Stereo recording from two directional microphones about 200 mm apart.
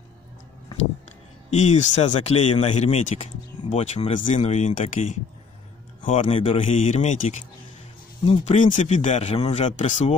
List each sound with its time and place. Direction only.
1.5 s speech: 35° left (ahead or behind)